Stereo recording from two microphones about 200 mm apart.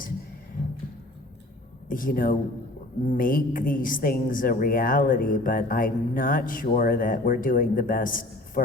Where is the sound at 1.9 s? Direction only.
45° left (ahead or behind).